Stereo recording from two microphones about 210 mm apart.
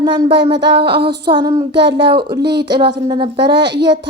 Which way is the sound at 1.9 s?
20° right (ahead or behind).